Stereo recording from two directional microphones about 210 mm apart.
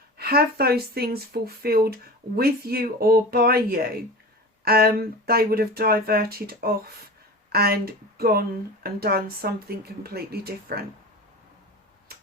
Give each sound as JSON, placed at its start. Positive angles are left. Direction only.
{"t": 0.2, "sound": "speech", "side_deg": -45}